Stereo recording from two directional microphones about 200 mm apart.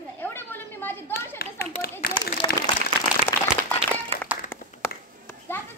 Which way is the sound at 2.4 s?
20° left (ahead or behind).